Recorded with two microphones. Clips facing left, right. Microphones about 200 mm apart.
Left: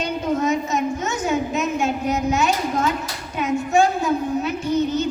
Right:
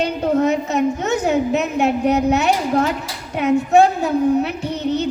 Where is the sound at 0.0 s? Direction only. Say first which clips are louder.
Right 5 dB; 60° right (ahead or behind).